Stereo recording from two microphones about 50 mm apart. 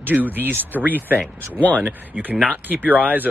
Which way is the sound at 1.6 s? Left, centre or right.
Left.